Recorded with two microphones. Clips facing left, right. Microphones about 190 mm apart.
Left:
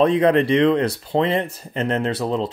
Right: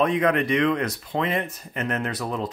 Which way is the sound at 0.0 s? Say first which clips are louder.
Left 5 dB; 30° left (ahead or behind).